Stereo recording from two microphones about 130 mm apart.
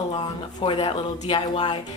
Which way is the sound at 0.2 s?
40° left (ahead or behind).